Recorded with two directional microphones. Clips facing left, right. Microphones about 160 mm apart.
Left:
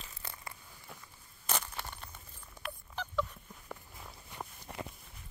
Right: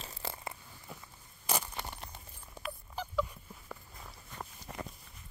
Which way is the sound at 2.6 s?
10° right (ahead or behind).